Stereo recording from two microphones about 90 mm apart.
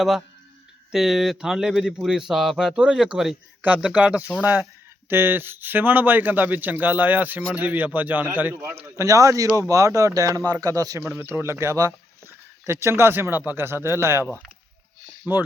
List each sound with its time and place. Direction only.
0.9 s speech: 5° right (ahead or behind)
5.0 s speech: 25° right (ahead or behind)
11.2 s speech: 25° right (ahead or behind)
15.3 s speech: 20° right (ahead or behind)